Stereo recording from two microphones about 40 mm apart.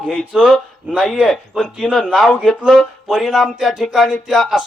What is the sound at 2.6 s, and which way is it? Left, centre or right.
Speech, centre.